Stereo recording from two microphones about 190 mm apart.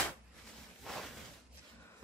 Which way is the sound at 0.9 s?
Centre (ahead or behind).